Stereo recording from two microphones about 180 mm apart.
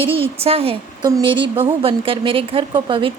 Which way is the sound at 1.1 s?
20° right (ahead or behind).